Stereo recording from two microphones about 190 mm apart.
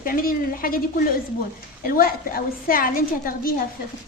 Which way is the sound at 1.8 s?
50° left (ahead or behind).